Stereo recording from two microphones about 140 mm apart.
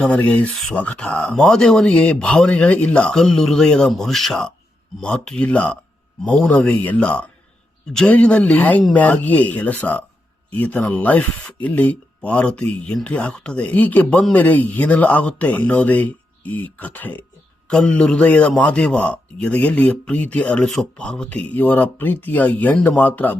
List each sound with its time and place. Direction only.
0.0 s speech: 10° left (ahead or behind)